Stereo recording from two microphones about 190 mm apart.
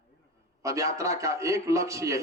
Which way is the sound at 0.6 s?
15° right (ahead or behind).